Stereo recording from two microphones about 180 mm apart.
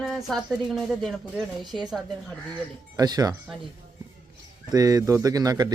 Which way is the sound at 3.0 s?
20° right (ahead or behind).